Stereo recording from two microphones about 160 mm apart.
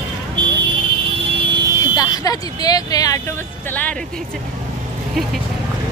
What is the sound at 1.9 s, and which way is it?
Speech, 25° left (ahead or behind).